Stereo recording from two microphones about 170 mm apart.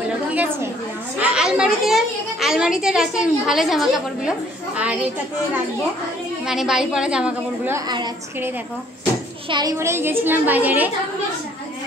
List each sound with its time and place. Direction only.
0.3 s chatter: 10° right (ahead or behind)
1.2 s a woman's voice: 5° right (ahead or behind)
7.7 s a woman's voice: 25° right (ahead or behind)
9.5 s a woman's voice: 20° right (ahead or behind)